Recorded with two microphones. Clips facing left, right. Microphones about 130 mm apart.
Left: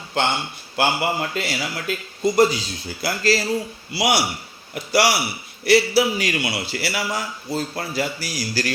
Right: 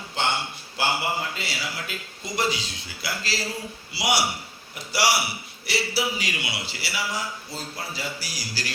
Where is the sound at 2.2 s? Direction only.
40° left (ahead or behind).